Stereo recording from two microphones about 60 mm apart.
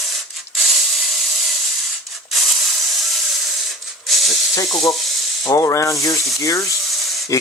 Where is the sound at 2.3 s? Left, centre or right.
Centre.